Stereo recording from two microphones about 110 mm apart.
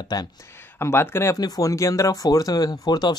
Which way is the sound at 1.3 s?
35° left (ahead or behind).